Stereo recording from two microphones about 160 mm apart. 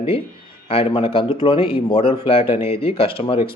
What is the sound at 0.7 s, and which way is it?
A man's voice, 35° left (ahead or behind).